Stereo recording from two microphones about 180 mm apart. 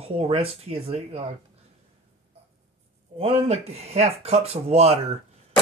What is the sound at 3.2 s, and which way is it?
Cutlery, 35° right (ahead or behind).